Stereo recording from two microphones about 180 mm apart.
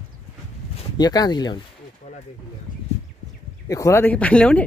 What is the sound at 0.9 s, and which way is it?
Speech, 20° left (ahead or behind).